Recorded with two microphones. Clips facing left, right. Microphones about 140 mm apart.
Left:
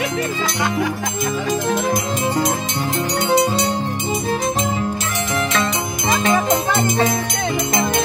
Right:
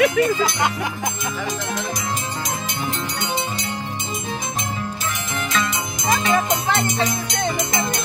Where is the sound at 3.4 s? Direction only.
80° left.